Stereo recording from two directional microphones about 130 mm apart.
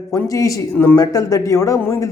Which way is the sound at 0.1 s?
25° left (ahead or behind).